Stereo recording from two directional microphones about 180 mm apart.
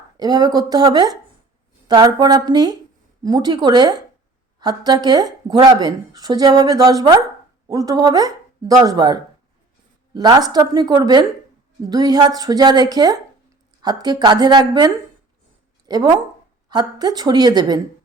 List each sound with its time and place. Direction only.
0.2 s speech: 20° right (ahead or behind)
10.2 s speech: 20° right (ahead or behind)